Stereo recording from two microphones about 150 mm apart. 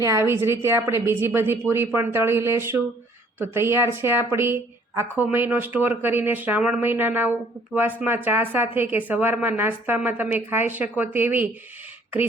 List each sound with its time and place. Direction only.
0.0 s speech: 20° right (ahead or behind)